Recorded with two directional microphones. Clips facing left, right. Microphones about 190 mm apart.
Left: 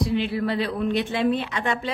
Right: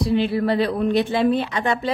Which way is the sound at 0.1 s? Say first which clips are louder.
Right 4 dB; 35° right (ahead or behind).